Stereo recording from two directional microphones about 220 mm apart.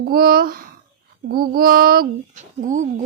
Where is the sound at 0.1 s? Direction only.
40° right (ahead or behind).